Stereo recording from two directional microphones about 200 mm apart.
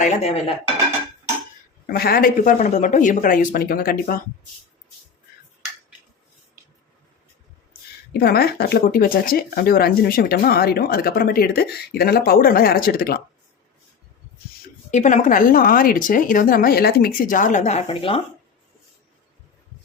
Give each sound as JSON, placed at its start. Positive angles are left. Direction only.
{"t": 0.0, "sound": "speech", "side_deg": 30}
{"t": 1.9, "sound": "speech", "side_deg": 50}
{"t": 8.1, "sound": "speech", "side_deg": 50}
{"t": 14.8, "sound": "speech", "side_deg": 35}